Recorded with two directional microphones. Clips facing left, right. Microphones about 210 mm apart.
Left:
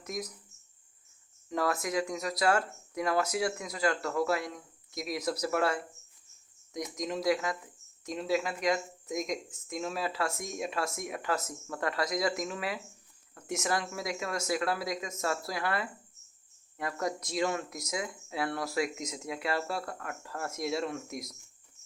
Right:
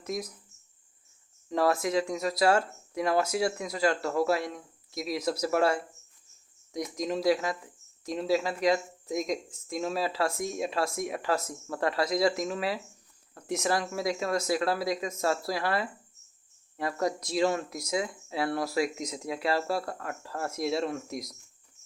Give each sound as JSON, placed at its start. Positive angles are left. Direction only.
{"t": 0.0, "sound": "speech", "side_deg": -30}
{"t": 1.5, "sound": "speech", "side_deg": -30}